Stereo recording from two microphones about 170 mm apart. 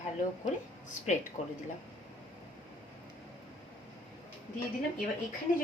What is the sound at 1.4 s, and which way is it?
Speech, 40° left (ahead or behind).